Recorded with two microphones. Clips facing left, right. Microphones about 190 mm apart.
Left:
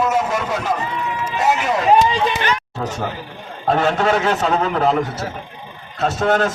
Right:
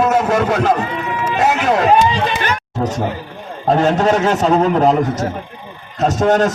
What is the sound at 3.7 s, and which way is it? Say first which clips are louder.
A man's voice: right 3 dB; 40° right (ahead or behind).